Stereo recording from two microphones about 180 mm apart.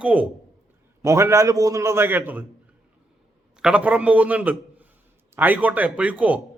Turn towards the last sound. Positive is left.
turn(degrees=-10)  # may be behind; listen again after turning